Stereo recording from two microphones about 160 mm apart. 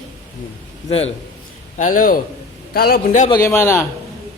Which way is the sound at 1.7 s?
55° left (ahead or behind).